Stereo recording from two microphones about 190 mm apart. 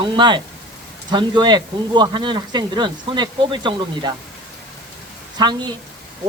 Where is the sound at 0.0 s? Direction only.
25° right (ahead or behind).